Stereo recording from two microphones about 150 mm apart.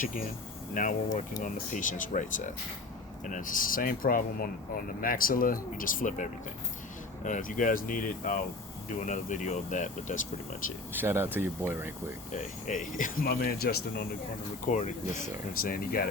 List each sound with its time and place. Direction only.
0.7 s speech: 60° left (ahead or behind)
7.3 s speech: 60° left (ahead or behind)
10.9 s speech: 15° right (ahead or behind)
12.3 s speech: 55° left (ahead or behind); by 14.0 s 90° left
14.7 s speech: 55° left (ahead or behind); by 16.0 s 75° left (ahead or behind)